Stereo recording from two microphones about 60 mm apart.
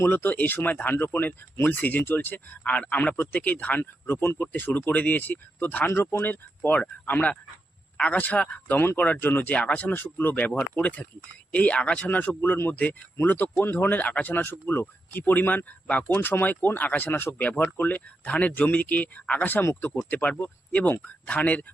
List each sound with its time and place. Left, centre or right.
0.0 s speech: left
9.6 s speech: centre
9.8 s speech: left
11.5 s speech: left
12.4 s speech: left
12.7 s speech: left
19.5 s speech: left